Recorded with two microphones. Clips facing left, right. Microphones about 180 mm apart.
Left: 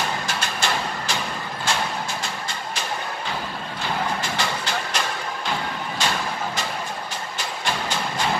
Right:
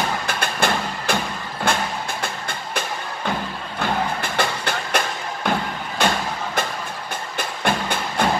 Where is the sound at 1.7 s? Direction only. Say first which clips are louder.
Right 4 dB; 55° right (ahead or behind).